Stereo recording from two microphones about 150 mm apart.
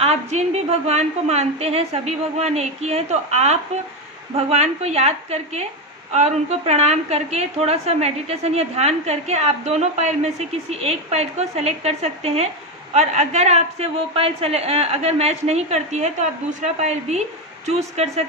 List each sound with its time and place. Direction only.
0.0 s a woman's voice: 50° right (ahead or behind)